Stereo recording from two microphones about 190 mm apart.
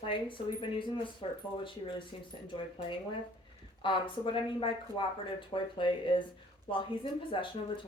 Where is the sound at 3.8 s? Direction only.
25° left (ahead or behind).